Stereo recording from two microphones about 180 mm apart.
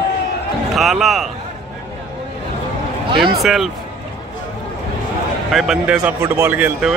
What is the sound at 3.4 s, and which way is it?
Speech, centre (ahead or behind).